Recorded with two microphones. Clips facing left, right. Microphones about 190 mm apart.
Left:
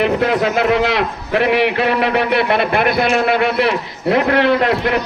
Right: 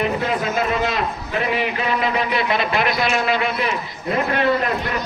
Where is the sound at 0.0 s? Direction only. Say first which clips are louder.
Left 6 dB; 70° left (ahead or behind).